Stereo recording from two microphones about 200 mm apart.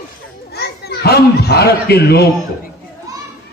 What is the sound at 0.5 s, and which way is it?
A child's voice, 55° left (ahead or behind).